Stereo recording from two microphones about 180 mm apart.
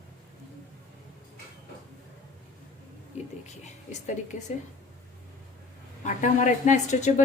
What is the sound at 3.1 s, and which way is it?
Speech, 40° left (ahead or behind).